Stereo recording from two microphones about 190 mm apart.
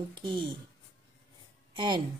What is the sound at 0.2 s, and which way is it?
Speech, 25° right (ahead or behind).